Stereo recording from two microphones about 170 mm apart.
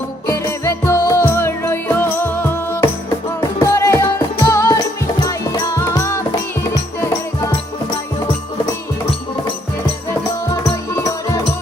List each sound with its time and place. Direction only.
0.3 s music: 15° left (ahead or behind)
10.5 s music: 20° left (ahead or behind)